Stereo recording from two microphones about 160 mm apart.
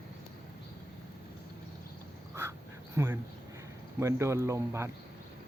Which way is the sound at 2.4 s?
15° right (ahead or behind).